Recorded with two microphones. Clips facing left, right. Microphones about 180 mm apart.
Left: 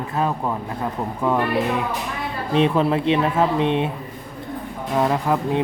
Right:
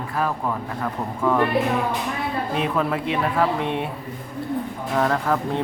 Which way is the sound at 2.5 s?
25° left (ahead or behind).